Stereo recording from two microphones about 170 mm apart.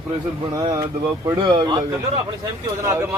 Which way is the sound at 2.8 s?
15° right (ahead or behind).